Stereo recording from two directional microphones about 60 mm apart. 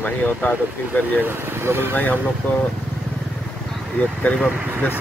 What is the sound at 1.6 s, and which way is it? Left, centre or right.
Speech, right.